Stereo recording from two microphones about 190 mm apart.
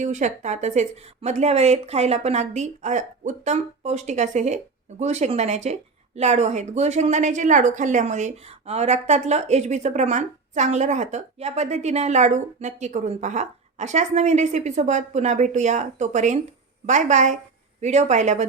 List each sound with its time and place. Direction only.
0.0 s speech: 40° right (ahead or behind)